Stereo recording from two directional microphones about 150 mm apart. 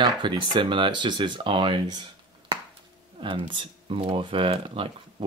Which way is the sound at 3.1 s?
35° right (ahead or behind).